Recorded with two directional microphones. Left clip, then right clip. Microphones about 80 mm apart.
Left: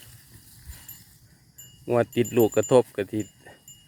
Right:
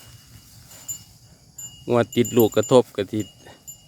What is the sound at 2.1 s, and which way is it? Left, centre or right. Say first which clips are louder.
Speech: right 3 dB; right.